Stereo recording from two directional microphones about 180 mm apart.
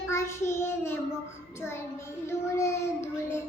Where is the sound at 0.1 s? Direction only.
15° left (ahead or behind).